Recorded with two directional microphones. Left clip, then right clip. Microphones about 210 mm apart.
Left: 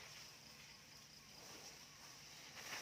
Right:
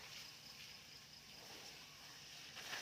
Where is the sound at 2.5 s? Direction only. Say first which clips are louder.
Right 2 dB; 15° right (ahead or behind).